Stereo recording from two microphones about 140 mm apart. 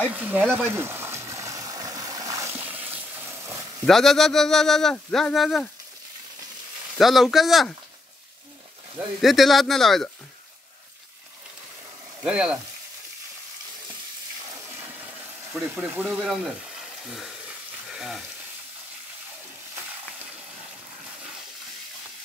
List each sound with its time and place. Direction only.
0.1 s speech: 15° right (ahead or behind)
0.7 s stream: 20° right (ahead or behind)
3.8 s speech: centre (ahead or behind)
7.0 s speech: centre (ahead or behind)
9.2 s speech: centre (ahead or behind)
12.2 s speech: 5° right (ahead or behind)
15.6 s speech: 15° right (ahead or behind)
17.0 s frying: centre (ahead or behind)